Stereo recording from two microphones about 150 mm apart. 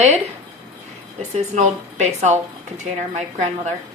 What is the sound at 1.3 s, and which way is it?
A woman's voice, 50° right (ahead or behind).